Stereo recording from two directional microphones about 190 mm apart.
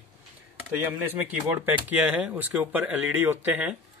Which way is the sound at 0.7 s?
10° right (ahead or behind).